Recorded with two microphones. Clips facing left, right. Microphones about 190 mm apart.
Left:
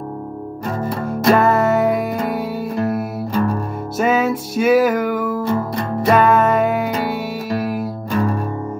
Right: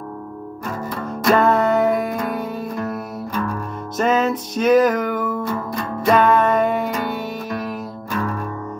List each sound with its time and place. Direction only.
0.7 s music: 30° left (ahead or behind)
1.3 s music: 5° left (ahead or behind)
3.3 s music: 30° left (ahead or behind)
4.0 s music: 5° left (ahead or behind)
5.4 s music: 30° left (ahead or behind)
6.0 s music: 5° left (ahead or behind)
8.1 s music: 30° left (ahead or behind)